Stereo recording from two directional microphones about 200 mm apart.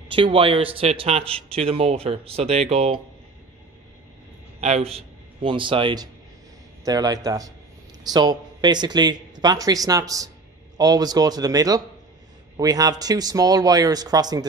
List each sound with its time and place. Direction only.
0.1 s a man's voice: 25° right (ahead or behind)
4.6 s a man's voice: 35° right (ahead or behind)